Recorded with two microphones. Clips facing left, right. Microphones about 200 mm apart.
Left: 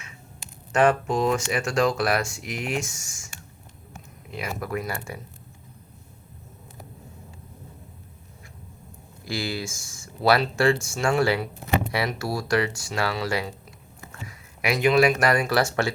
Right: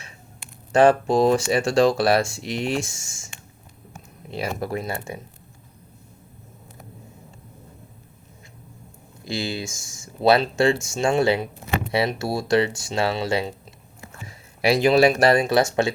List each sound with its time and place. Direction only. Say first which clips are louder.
0.7 s speech: right 4 dB; 30° right (ahead or behind)
4.3 s speech: right 4 dB; 30° right (ahead or behind)
9.2 s speech: right 2 dB; 20° right (ahead or behind)